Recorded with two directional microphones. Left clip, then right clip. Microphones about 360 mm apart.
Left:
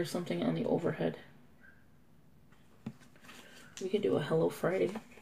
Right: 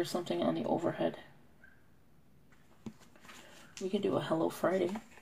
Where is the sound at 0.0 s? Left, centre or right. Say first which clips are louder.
Right 2 dB; right.